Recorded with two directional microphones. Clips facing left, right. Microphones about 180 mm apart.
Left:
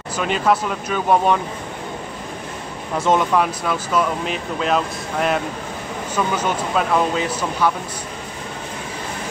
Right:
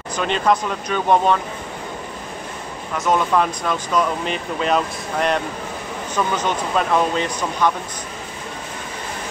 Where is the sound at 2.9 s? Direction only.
30° left (ahead or behind).